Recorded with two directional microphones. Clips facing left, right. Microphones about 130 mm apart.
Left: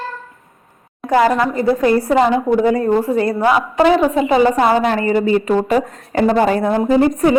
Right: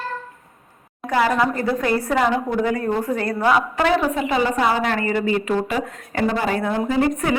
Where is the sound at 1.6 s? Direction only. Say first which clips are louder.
Left 7 dB; 35° left (ahead or behind).